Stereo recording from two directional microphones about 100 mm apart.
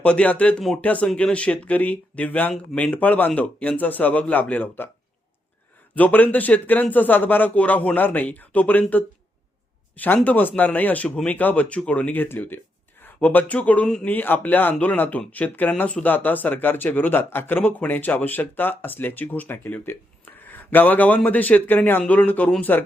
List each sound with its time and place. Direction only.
0.0 s speech: 10° left (ahead or behind)
5.9 s speech: 15° left (ahead or behind)
10.2 s speech: 15° left (ahead or behind)